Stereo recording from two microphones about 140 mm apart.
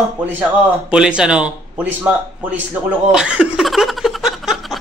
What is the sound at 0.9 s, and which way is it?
Speech, 5° right (ahead or behind).